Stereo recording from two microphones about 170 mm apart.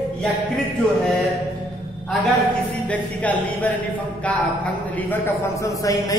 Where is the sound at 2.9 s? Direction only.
10° left (ahead or behind).